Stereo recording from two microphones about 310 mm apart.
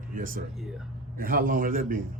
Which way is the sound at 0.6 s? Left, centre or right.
Centre.